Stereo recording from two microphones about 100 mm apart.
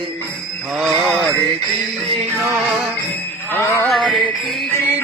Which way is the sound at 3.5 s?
25° left (ahead or behind).